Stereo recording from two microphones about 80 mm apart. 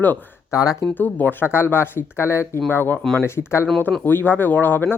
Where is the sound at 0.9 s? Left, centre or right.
Left.